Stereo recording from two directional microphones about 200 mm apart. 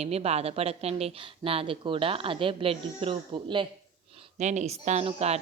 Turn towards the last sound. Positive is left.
turn(degrees=-30)  # may be behind; listen again after turning